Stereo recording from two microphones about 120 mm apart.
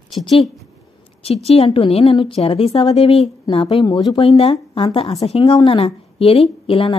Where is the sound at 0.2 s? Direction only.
50° left (ahead or behind).